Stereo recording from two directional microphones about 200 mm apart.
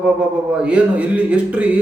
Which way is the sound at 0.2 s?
5° right (ahead or behind).